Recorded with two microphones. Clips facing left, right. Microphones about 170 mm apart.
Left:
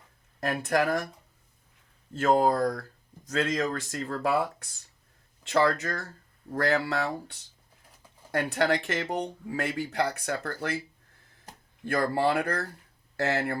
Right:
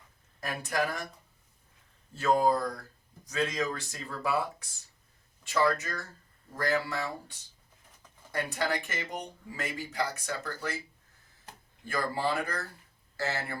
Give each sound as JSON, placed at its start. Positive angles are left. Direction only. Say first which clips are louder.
{"t": 0.7, "sound": "speech", "louder": "left 6 dB", "side_deg": 55}
{"t": 2.1, "sound": "speech", "louder": "left 3 dB", "side_deg": 55}
{"t": 11.9, "sound": "speech", "louder": "left 6 dB", "side_deg": 60}